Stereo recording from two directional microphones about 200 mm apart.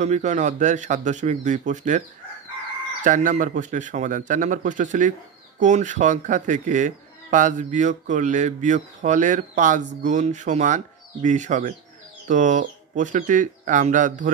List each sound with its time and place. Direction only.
0.0 s speech: 35° right (ahead or behind)